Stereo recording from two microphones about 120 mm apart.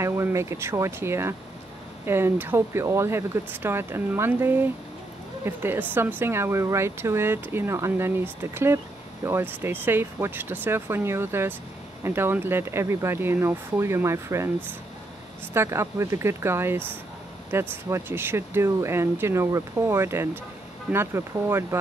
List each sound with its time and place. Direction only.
0.0 s speech: 20° right (ahead or behind)